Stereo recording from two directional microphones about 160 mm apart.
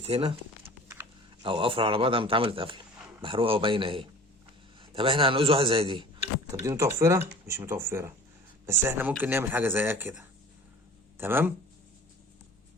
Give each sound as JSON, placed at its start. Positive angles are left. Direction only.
{"t": 0.0, "sound": "a man's voice", "side_deg": -35}
{"t": 0.6, "sound": "horse", "side_deg": -15}
{"t": 1.4, "sound": "a man's voice", "side_deg": -35}
{"t": 6.6, "sound": "speech", "side_deg": -20}